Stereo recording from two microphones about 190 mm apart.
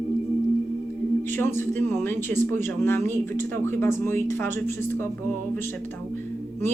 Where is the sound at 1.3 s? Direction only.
10° left (ahead or behind).